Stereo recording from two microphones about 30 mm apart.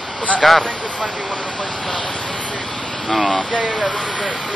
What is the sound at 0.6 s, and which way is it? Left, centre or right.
Speech, left.